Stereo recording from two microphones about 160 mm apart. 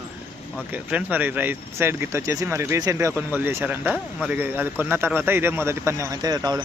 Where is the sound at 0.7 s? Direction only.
10° right (ahead or behind).